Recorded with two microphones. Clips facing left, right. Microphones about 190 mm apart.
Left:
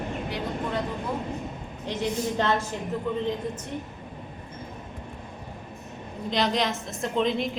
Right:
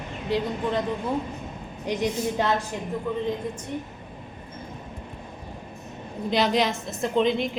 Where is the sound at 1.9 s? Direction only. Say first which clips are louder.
Right 2 dB; 15° right (ahead or behind).